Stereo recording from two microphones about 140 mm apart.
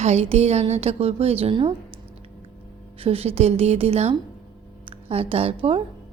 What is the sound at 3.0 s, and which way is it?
A woman's voice, 45° right (ahead or behind).